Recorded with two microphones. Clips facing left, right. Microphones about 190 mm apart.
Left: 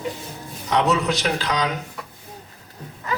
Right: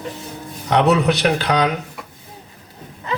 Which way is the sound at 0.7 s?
65° right (ahead or behind).